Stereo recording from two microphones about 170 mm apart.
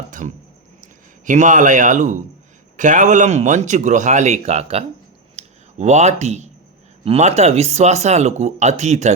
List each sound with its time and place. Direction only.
1.2 s speech: 50° right (ahead or behind)
5.4 s a sound: 40° right (ahead or behind)
7.0 s speech: 40° right (ahead or behind)